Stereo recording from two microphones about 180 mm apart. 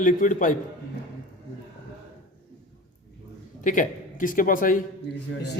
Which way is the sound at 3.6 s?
45° left (ahead or behind).